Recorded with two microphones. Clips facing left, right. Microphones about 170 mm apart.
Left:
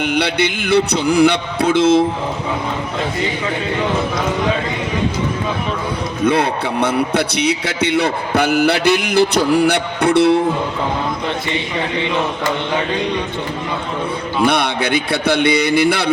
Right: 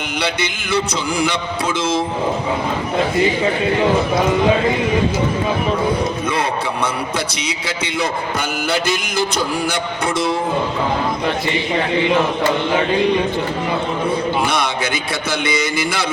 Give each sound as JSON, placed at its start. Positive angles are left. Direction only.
{"t": 0.2, "sound": "a man's voice", "side_deg": 60}
{"t": 6.8, "sound": "a man's voice", "side_deg": 65}
{"t": 14.4, "sound": "a man's voice", "side_deg": 60}